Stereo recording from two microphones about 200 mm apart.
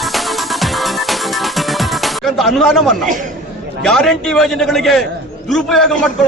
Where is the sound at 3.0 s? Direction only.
40° right (ahead or behind).